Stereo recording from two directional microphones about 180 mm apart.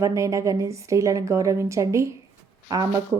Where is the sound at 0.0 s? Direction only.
15° right (ahead or behind).